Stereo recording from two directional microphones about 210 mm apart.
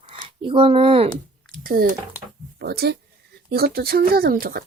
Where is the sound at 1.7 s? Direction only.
45° right (ahead or behind).